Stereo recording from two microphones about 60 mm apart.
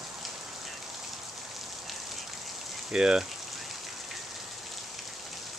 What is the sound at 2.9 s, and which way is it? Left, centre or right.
Speech, centre.